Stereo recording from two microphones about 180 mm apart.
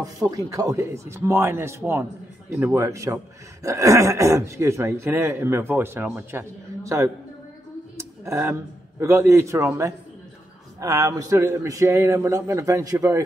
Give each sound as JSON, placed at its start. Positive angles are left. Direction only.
{"t": 0.0, "sound": "speech", "side_deg": -20}
{"t": 8.0, "sound": "a sound", "side_deg": -15}
{"t": 9.0, "sound": "speech", "side_deg": -15}